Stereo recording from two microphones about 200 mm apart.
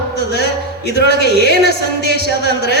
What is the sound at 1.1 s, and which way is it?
Speech, 55° left (ahead or behind).